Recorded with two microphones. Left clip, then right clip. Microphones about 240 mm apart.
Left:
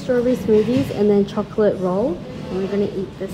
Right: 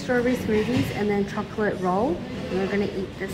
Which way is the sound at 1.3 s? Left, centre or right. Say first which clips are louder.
Left 8 dB; centre.